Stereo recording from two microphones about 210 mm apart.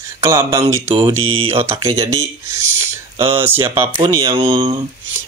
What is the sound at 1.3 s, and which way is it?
Speech, 25° right (ahead or behind).